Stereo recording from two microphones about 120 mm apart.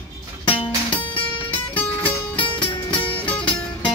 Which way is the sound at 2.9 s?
10° left (ahead or behind).